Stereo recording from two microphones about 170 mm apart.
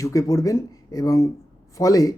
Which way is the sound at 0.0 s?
20° left (ahead or behind).